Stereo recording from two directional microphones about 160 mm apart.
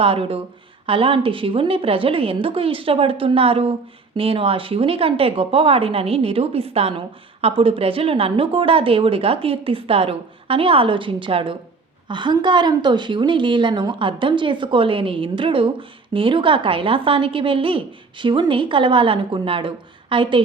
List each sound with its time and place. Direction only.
0.0 s a woman's voice: 35° right (ahead or behind)